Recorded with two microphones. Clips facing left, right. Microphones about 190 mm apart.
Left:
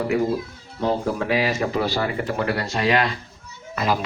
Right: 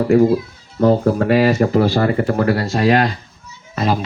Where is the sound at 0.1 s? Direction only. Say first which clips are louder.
Right 9 dB; 50° right (ahead or behind).